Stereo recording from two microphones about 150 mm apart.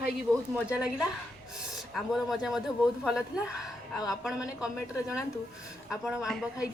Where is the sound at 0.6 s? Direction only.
5° right (ahead or behind).